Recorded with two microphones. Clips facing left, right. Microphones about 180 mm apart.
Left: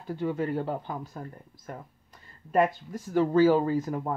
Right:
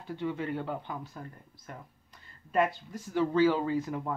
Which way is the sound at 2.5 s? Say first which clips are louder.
Left 4 dB; 45° left (ahead or behind).